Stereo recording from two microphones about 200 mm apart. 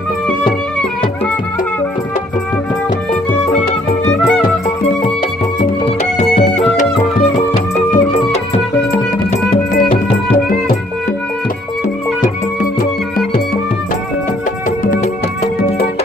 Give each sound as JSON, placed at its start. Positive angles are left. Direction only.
{"t": 4.1, "sound": "music", "side_deg": 5}
{"t": 6.1, "sound": "music", "side_deg": 35}
{"t": 7.7, "sound": "music", "side_deg": 35}
{"t": 8.9, "sound": "music", "side_deg": 45}
{"t": 14.9, "sound": "music", "side_deg": 35}